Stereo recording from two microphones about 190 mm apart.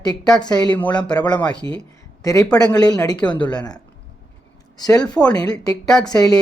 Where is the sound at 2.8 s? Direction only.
20° left (ahead or behind).